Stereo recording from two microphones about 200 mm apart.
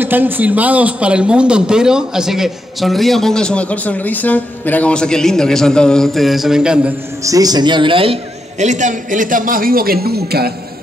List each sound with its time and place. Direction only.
0.0 s a man's voice: 10° right (ahead or behind)
7.2 s a man's voice: 20° right (ahead or behind); by 10.5 s 50° right (ahead or behind)